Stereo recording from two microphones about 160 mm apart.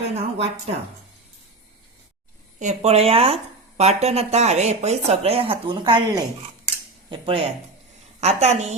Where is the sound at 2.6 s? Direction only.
45° right (ahead or behind).